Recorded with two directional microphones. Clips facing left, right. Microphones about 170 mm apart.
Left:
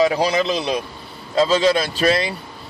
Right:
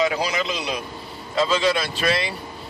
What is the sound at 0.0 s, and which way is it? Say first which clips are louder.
Speech: left 5 dB; 30° left (ahead or behind).